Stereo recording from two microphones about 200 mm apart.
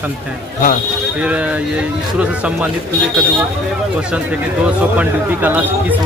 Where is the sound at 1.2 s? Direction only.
5° right (ahead or behind).